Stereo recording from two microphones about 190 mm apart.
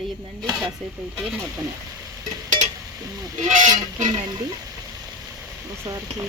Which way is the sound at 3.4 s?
40° right (ahead or behind).